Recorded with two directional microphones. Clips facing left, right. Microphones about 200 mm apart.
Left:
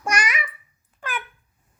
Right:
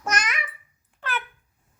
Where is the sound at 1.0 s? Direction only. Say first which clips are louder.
Even; 10° left (ahead or behind).